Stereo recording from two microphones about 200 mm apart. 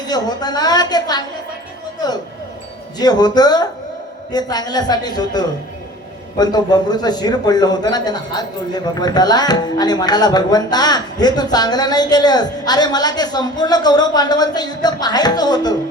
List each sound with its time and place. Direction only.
0.1 s a man's voice: 20° left (ahead or behind)
3.0 s a man's voice: 20° left (ahead or behind)